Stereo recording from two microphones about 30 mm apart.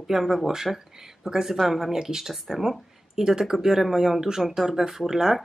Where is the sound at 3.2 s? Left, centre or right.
Right.